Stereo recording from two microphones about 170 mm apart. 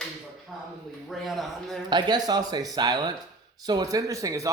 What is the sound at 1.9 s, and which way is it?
Speech, 25° right (ahead or behind).